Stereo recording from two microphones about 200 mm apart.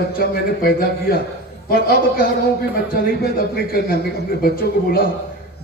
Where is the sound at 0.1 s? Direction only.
50° left (ahead or behind).